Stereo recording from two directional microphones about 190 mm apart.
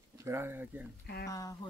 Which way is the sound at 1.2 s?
20° left (ahead or behind).